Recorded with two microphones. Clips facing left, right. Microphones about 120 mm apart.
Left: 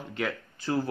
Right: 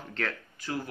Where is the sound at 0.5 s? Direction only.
30° left (ahead or behind).